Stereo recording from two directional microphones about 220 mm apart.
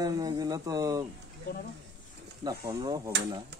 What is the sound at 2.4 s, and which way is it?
Speech, 15° right (ahead or behind).